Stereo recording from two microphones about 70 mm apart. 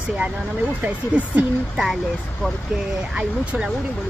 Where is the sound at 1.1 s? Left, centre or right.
Centre.